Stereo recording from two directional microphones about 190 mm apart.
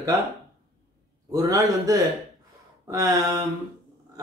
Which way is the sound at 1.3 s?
20° right (ahead or behind).